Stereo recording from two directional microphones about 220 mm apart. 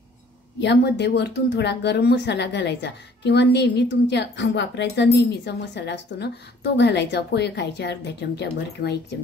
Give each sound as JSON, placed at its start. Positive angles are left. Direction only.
{"t": 0.6, "sound": "speech", "side_deg": 50}